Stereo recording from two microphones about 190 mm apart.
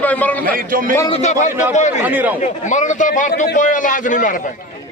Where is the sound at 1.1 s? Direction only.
35° left (ahead or behind).